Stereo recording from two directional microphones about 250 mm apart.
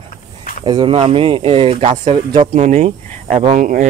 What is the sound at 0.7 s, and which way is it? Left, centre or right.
Speech, centre.